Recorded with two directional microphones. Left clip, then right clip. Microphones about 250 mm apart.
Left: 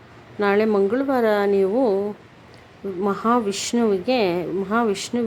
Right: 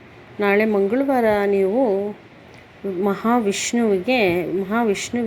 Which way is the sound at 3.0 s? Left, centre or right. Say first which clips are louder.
Right 1 dB; centre.